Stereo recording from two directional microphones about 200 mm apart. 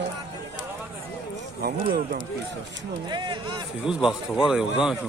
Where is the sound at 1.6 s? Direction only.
50° right (ahead or behind).